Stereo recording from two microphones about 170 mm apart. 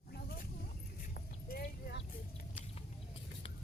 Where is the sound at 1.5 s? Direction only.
60° left (ahead or behind).